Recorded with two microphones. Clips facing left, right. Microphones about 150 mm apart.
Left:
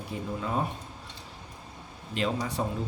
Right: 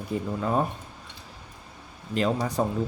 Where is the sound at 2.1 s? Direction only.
40° right (ahead or behind).